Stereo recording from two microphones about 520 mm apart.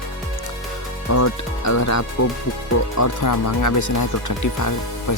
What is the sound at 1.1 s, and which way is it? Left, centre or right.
Speech, left.